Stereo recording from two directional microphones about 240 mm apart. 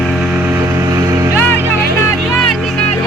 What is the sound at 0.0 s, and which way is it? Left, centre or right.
Music, centre.